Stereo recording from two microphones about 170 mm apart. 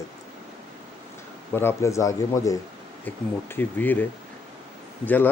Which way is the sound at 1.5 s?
15° left (ahead or behind).